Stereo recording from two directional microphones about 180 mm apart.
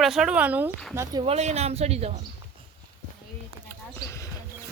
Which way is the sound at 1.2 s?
35° right (ahead or behind).